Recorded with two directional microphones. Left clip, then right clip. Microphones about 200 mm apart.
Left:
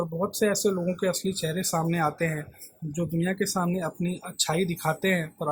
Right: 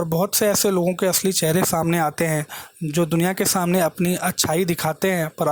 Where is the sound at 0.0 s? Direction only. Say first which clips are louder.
Right 6 dB; 45° right (ahead or behind).